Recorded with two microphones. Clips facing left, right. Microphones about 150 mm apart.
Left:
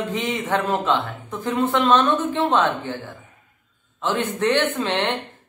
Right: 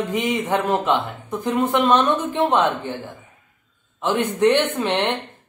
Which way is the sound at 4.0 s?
15° right (ahead or behind).